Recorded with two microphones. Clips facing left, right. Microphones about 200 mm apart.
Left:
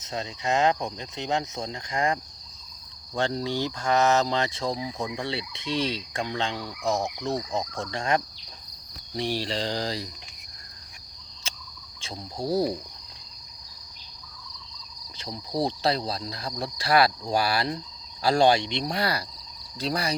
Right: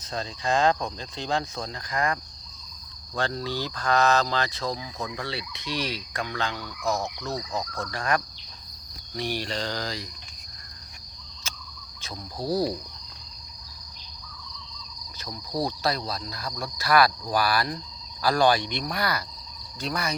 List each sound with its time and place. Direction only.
0.0 s speech: 20° left (ahead or behind)
3.2 s speech: 20° left (ahead or behind)
11.5 s cricket: 30° left (ahead or behind)
15.2 s speech: 25° left (ahead or behind)
19.8 s cricket: 30° left (ahead or behind)